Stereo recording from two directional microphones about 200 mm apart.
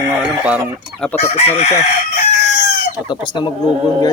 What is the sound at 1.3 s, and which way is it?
Chicken, 30° left (ahead or behind).